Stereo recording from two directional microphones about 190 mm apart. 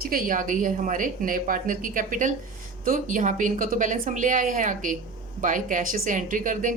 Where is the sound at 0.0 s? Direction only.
50° right (ahead or behind).